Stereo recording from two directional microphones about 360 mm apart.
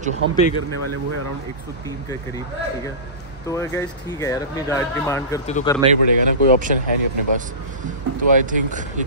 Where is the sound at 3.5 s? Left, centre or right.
Centre.